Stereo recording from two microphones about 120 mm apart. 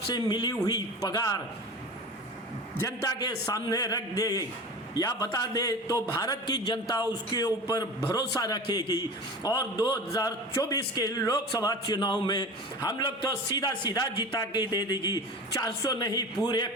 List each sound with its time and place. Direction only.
0.1 s a man's voice: 35° left (ahead or behind)
2.8 s a man's voice: 30° left (ahead or behind)